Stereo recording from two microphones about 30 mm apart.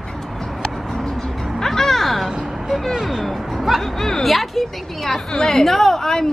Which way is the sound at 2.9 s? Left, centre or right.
Centre.